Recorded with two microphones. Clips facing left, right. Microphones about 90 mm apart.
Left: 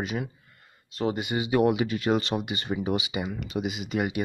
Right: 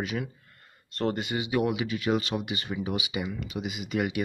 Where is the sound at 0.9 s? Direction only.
5° left (ahead or behind).